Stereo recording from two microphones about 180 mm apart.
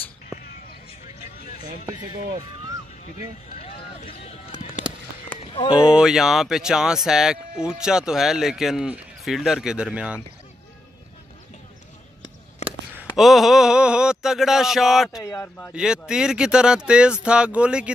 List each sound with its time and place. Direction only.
1.4 s a sound: 55° left (ahead or behind)
4.1 s a sound: 35° left (ahead or behind)
5.5 s speech: 25° left (ahead or behind)
5.8 s speech: 5° right (ahead or behind)
13.1 s speech: centre (ahead or behind)
15.2 s speech: 15° left (ahead or behind)
15.7 s speech: 5° right (ahead or behind)